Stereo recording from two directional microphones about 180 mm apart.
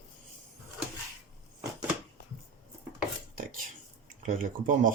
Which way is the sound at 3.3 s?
50° right (ahead or behind).